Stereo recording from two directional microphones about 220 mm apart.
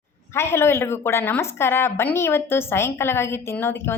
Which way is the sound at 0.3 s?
10° left (ahead or behind).